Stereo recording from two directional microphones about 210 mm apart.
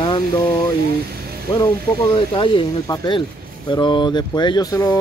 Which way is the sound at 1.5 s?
20° left (ahead or behind).